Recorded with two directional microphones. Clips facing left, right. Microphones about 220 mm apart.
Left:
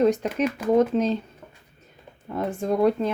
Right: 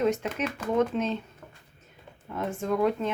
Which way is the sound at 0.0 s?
35° left (ahead or behind).